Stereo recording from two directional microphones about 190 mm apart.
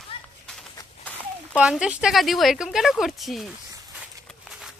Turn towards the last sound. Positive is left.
turn(degrees=0)  # may be behind; listen again after turning